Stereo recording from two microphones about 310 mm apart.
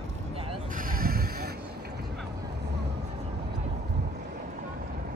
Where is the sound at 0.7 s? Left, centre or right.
Right.